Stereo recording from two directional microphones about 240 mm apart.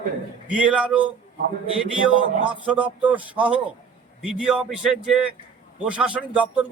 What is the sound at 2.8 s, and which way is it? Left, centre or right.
A man's voice, centre.